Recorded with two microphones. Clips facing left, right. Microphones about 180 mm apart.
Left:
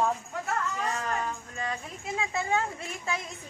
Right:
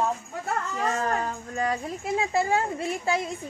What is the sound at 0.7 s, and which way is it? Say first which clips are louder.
Speech: right 5 dB; 40° right (ahead or behind).